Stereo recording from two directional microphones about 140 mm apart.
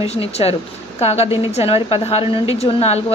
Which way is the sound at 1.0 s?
50° left (ahead or behind).